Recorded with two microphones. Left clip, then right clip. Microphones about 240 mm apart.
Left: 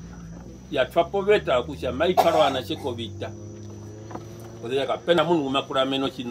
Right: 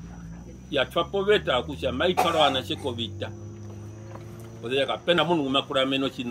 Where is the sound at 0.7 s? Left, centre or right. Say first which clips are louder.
Left 3 dB; centre.